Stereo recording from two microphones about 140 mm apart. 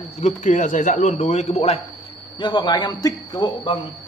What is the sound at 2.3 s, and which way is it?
Speech, 35° left (ahead or behind).